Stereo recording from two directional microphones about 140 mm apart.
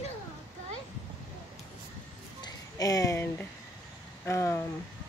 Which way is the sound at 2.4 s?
25° left (ahead or behind).